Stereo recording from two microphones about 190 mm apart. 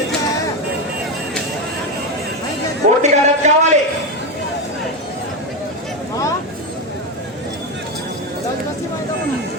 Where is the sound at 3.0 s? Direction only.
40° right (ahead or behind).